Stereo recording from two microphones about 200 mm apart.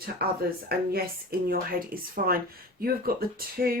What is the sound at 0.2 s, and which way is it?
Speech, 50° right (ahead or behind).